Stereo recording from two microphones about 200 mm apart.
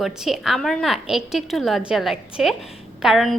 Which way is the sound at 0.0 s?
Centre (ahead or behind).